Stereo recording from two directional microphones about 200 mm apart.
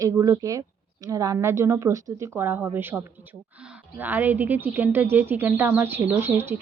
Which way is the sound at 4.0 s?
10° right (ahead or behind).